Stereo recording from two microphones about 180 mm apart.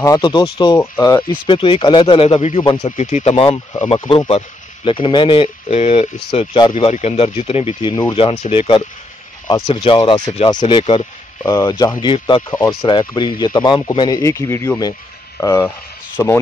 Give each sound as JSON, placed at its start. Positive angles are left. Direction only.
{"t": 0.0, "sound": "speech", "side_deg": 20}
{"t": 1.3, "sound": "speech", "side_deg": 30}
{"t": 3.3, "sound": "speech", "side_deg": 25}